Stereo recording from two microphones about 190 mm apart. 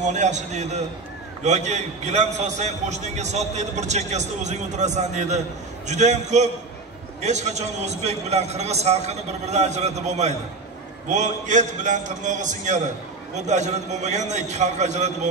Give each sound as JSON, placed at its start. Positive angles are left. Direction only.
{"t": 0.0, "sound": "a man's voice", "side_deg": -40}